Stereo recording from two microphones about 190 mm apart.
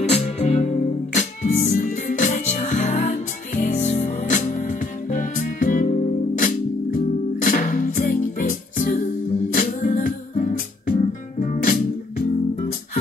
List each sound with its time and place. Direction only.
0.1 s music: 35° left (ahead or behind)